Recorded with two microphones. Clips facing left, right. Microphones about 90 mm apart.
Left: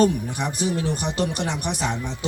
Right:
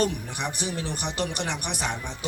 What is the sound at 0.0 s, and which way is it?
Speech, 35° left (ahead or behind).